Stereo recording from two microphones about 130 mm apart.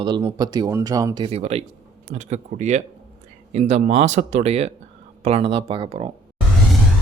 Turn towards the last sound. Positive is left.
turn(degrees=-45)  # may be behind; listen again after turning